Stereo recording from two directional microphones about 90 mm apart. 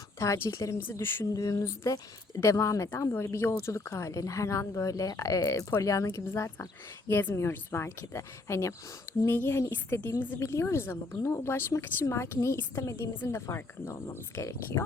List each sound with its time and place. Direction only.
0.2 s speech: 35° left (ahead or behind)
0.8 s a woman's voice: 25° left (ahead or behind)
1.3 s a woman's voice: 40° left (ahead or behind)